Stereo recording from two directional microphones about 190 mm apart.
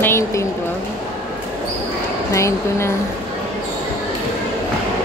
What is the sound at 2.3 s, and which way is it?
Speech, 15° left (ahead or behind).